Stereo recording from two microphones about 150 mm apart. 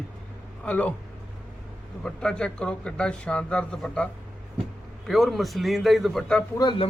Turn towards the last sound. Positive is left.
turn(degrees=30)  # may be behind; listen again after turning